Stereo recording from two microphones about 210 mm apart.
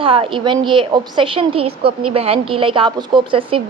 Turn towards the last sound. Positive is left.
turn(degrees=-25)  # may be behind; listen again after turning